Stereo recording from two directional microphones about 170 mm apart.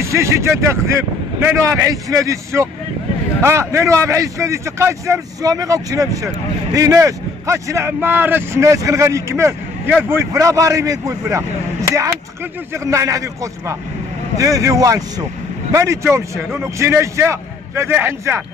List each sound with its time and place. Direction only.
0.0 s a man's voice: 15° right (ahead or behind)
12.7 s a man's voice: 20° right (ahead or behind)